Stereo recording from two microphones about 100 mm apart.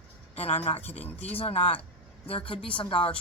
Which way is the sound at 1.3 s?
75° left (ahead or behind).